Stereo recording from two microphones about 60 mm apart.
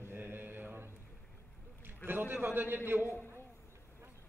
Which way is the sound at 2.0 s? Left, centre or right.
Right.